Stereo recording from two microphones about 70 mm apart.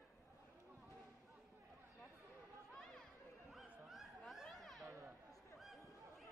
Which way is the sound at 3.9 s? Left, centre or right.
Centre.